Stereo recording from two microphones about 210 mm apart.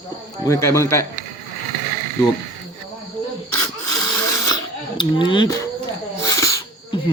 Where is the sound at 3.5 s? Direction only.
15° left (ahead or behind).